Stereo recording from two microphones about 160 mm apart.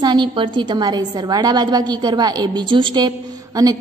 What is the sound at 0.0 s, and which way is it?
A woman's voice, 30° right (ahead or behind).